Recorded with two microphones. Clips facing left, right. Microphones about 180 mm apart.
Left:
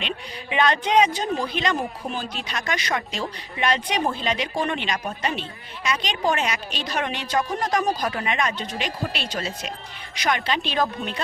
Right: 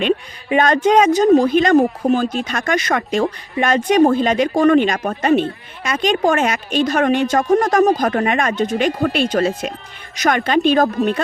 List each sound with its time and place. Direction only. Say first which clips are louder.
0.5 s speech: right 6 dB; 45° right (ahead or behind)